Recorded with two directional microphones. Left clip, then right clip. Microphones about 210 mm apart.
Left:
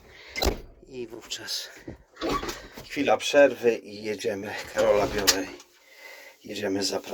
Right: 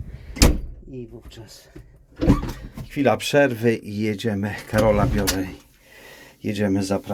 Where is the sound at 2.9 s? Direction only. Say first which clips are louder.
Right 4 dB; 5° right (ahead or behind).